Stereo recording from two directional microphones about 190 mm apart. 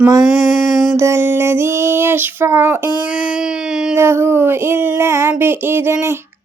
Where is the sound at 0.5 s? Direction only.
45° left (ahead or behind).